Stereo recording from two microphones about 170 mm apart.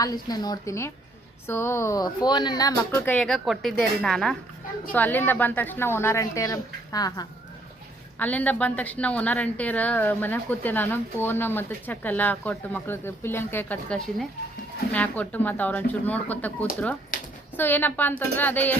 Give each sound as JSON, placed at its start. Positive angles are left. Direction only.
{"t": 0.0, "sound": "a woman's voice", "side_deg": 20}
{"t": 8.2, "sound": "a woman's voice", "side_deg": 10}